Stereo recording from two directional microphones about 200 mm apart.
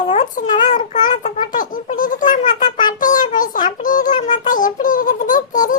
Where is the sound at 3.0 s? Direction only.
40° left (ahead or behind).